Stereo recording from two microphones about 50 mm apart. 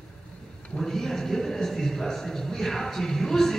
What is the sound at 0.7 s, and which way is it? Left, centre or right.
A man's voice, centre.